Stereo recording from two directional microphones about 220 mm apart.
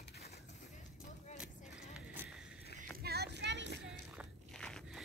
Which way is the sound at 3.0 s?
45° right (ahead or behind).